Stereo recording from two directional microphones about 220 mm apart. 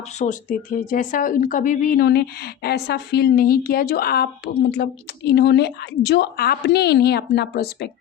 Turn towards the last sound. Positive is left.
turn(degrees=45)  # may be behind; listen again after turning